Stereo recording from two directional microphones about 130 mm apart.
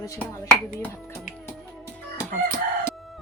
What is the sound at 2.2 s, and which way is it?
Crowing, 25° left (ahead or behind).